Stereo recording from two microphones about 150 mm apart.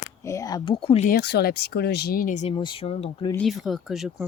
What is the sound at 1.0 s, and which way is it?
Speech, 90° left.